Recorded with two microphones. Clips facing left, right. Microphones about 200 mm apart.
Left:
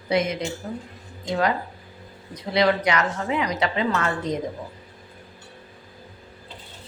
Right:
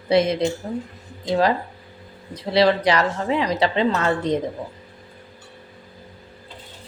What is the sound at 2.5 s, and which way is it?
A woman's voice, 30° right (ahead or behind).